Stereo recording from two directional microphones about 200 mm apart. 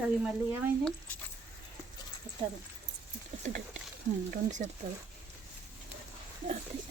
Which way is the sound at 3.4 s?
35° right (ahead or behind).